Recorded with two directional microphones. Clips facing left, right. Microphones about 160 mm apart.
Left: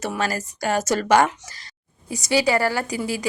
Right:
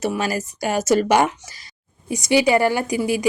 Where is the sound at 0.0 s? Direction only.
10° right (ahead or behind).